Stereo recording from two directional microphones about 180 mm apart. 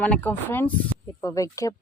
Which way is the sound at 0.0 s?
10° left (ahead or behind).